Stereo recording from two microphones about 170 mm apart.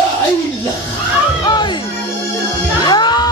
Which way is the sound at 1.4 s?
25° left (ahead or behind).